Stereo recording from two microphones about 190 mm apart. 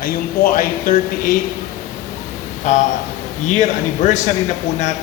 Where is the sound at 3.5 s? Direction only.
40° left (ahead or behind).